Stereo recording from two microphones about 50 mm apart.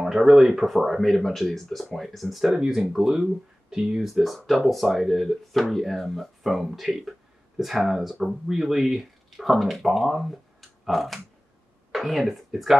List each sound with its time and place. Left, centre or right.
0.0 s speech: centre